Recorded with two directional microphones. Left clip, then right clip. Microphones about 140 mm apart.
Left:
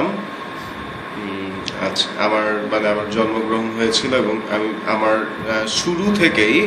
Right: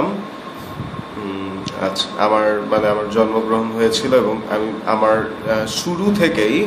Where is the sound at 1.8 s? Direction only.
55° right (ahead or behind).